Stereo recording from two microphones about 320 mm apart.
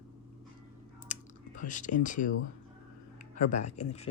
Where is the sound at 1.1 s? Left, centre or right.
Left.